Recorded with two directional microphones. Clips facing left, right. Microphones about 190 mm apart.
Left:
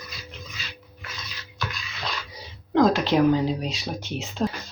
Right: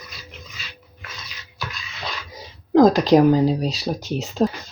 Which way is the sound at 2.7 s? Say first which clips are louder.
Right 6 dB; 40° right (ahead or behind).